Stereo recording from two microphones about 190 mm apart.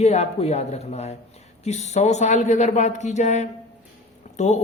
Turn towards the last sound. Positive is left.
turn(degrees=40)  # may be behind; listen again after turning